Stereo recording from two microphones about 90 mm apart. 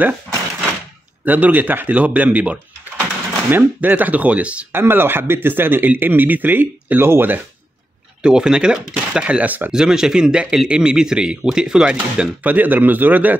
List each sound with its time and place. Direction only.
1.2 s speech: 20° right (ahead or behind)
4.7 s speech: 25° right (ahead or behind)
8.2 s speech: 10° right (ahead or behind)